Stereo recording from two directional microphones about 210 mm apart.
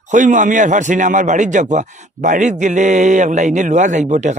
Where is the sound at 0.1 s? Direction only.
35° right (ahead or behind).